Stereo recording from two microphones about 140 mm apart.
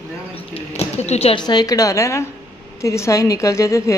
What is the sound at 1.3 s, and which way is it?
Speech, 30° left (ahead or behind).